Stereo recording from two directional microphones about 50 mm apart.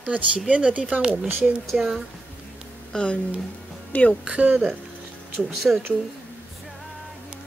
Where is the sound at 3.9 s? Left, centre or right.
Left.